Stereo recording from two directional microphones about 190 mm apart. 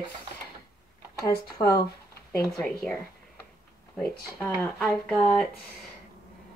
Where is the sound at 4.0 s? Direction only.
5° left (ahead or behind).